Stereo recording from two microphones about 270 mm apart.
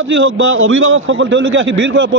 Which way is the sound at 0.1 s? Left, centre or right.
Right.